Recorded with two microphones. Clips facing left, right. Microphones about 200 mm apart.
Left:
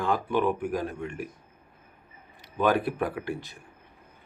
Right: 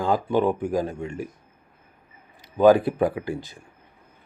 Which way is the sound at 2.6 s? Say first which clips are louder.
Right 8 dB; 25° right (ahead or behind).